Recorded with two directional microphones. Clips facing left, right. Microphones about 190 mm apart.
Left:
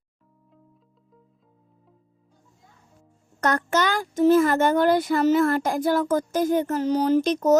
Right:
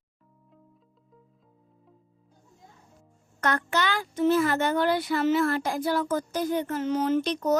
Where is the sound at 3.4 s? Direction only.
45° left (ahead or behind).